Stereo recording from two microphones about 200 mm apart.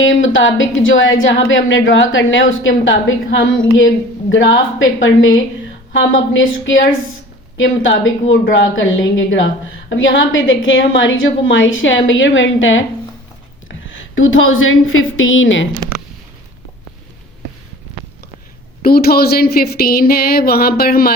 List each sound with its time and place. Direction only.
0.0 s a woman's voice: 75° left (ahead or behind)
18.8 s speech: 50° left (ahead or behind)